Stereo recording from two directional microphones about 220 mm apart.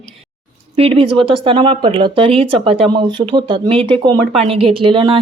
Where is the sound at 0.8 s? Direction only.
25° right (ahead or behind).